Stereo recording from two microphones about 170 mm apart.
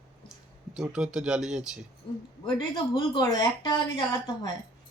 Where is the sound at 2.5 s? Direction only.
25° left (ahead or behind).